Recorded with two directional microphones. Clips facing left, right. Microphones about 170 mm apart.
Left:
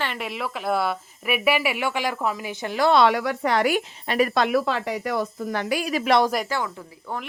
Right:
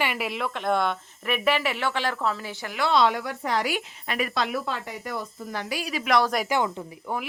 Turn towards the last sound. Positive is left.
turn(degrees=-20)  # may be behind; listen again after turning